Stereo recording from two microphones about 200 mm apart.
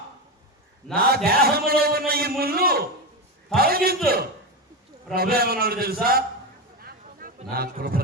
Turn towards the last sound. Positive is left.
turn(degrees=-50)  # may be behind; listen again after turning